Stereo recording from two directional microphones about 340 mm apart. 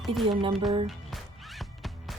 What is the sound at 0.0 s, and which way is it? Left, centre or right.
Speech, centre.